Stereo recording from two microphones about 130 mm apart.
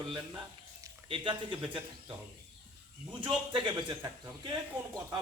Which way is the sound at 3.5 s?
35° right (ahead or behind).